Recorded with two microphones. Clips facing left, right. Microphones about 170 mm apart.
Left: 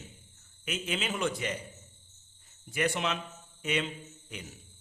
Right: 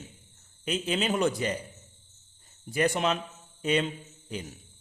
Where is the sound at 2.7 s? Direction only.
35° right (ahead or behind).